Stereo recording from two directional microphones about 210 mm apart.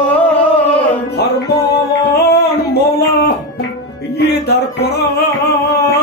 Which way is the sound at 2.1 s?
50° left (ahead or behind).